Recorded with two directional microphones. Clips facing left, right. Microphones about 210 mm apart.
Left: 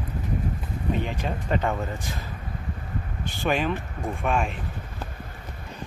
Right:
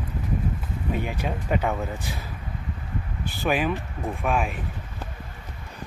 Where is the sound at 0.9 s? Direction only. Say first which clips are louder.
Right 1 dB; 10° right (ahead or behind).